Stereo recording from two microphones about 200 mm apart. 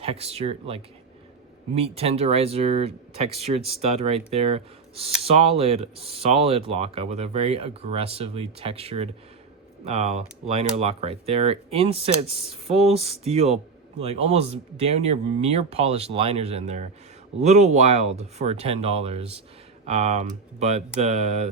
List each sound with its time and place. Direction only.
0.0 s speech: 30° right (ahead or behind)